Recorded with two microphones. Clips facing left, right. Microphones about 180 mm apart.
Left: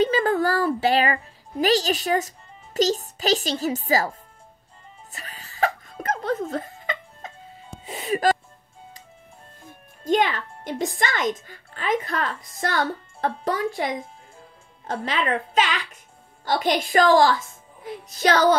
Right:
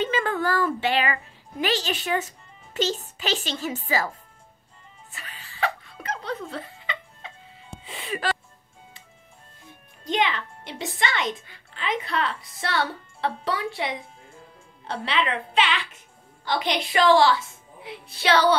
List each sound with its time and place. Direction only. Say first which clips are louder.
0.0 s a child's voice: left 5 dB; 40° left (ahead or behind)
5.1 s music: left 2 dB; 40° left (ahead or behind)
9.7 s a child's voice: left 8 dB; 45° left (ahead or behind)